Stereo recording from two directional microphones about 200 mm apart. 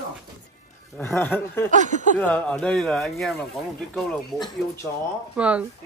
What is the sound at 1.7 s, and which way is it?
Speech, 40° right (ahead or behind).